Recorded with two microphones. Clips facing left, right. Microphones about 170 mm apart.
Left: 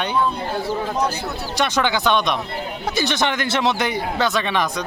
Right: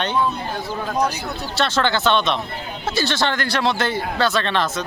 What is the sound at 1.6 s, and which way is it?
Speech, 15° left (ahead or behind).